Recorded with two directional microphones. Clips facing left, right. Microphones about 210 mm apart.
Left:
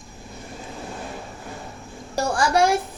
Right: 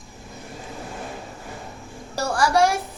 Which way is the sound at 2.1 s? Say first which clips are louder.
Even; 20° left (ahead or behind).